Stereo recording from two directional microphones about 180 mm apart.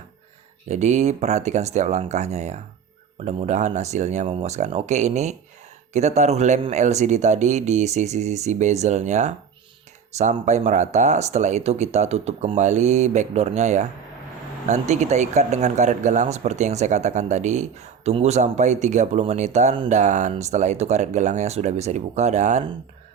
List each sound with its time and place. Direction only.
0.7 s speech: 40° right (ahead or behind)
10.4 s speech: 40° right (ahead or behind)